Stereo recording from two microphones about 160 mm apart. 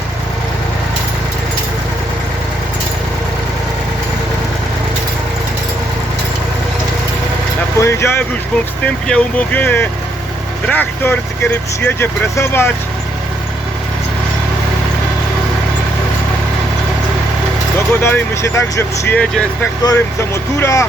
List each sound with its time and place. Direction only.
7.8 s speech: 15° left (ahead or behind)
17.7 s speech: 15° left (ahead or behind)
19.8 s speech: 20° left (ahead or behind)